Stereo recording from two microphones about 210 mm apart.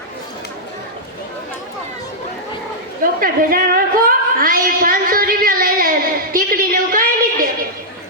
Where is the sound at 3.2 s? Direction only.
45° right (ahead or behind).